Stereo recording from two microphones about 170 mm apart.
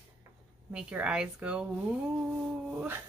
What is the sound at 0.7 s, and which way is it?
Speech, 5° right (ahead or behind).